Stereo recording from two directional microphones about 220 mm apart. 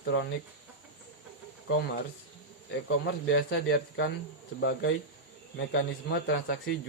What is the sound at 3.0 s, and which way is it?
A man's voice, 50° left (ahead or behind).